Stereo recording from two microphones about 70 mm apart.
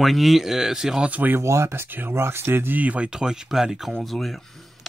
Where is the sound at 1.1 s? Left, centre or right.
Right.